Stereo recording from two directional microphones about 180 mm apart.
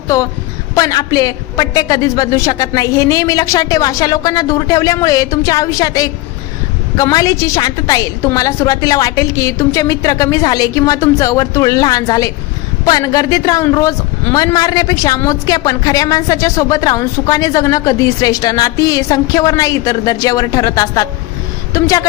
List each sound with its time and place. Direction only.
0.8 s a woman's voice: 20° left (ahead or behind)